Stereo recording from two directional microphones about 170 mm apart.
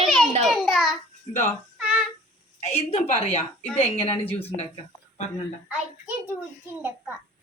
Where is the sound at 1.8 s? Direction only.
10° right (ahead or behind).